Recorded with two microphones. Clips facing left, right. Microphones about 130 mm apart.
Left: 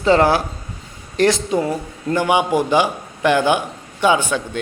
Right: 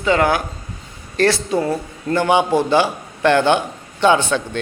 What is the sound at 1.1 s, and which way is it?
A man's voice, 15° left (ahead or behind).